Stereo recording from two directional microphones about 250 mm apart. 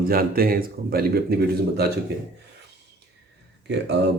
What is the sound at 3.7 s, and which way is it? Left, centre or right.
Speech, right.